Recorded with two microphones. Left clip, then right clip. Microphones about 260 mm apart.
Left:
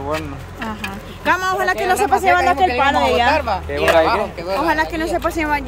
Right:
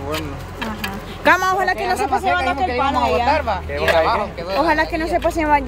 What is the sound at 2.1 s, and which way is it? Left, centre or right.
Speech, left.